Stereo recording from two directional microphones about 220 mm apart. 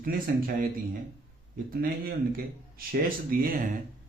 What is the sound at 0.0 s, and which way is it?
Speech, 40° right (ahead or behind).